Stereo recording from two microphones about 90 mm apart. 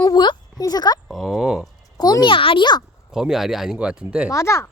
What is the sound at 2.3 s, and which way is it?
Speech, 70° left (ahead or behind).